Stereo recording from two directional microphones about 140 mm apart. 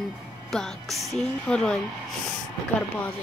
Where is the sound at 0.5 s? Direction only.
5° left (ahead or behind).